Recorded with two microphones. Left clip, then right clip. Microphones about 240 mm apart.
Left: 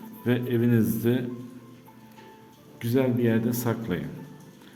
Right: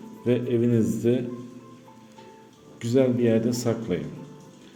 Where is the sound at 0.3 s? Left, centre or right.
Centre.